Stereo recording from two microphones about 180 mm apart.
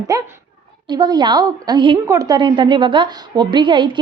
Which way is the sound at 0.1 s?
20° right (ahead or behind).